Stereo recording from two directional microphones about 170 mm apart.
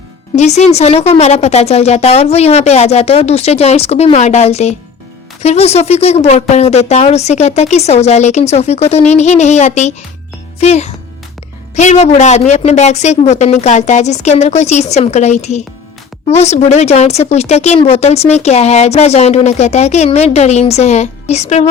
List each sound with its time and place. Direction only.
0.3 s a woman's voice: 40° left (ahead or behind)